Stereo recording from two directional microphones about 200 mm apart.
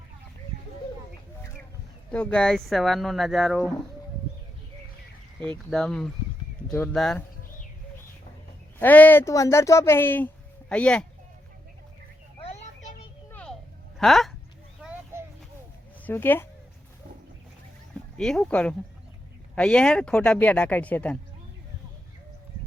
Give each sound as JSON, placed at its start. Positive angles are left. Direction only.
{"t": 2.0, "sound": "speech", "side_deg": 5}
{"t": 5.4, "sound": "speech", "side_deg": 5}
{"t": 8.8, "sound": "speech", "side_deg": 10}
{"t": 12.4, "sound": "a sound", "side_deg": 35}
{"t": 14.0, "sound": "speech", "side_deg": 0}
{"t": 14.8, "sound": "a sound", "side_deg": -5}
{"t": 16.0, "sound": "speech", "side_deg": 10}
{"t": 18.2, "sound": "speech", "side_deg": 5}